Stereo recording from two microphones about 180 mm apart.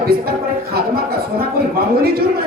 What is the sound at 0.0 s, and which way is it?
Speech, 60° right (ahead or behind).